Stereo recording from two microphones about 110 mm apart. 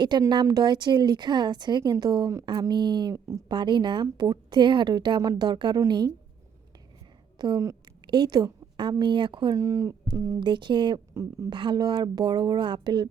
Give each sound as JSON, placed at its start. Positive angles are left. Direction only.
{"t": 0.0, "sound": "a woman's voice", "side_deg": -40}
{"t": 7.3, "sound": "a woman's voice", "side_deg": -45}
{"t": 9.6, "sound": "a sound", "side_deg": -30}
{"t": 10.4, "sound": "a woman's voice", "side_deg": -45}
{"t": 11.1, "sound": "speech", "side_deg": -30}
{"t": 11.4, "sound": "a woman's voice", "side_deg": -45}